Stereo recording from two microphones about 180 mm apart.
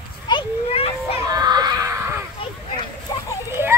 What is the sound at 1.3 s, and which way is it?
Screaming, 20° right (ahead or behind).